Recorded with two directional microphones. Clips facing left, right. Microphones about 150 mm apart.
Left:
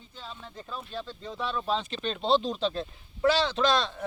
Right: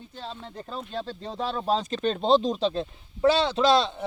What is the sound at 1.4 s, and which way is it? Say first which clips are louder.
Speech: right 4 dB; 45° right (ahead or behind).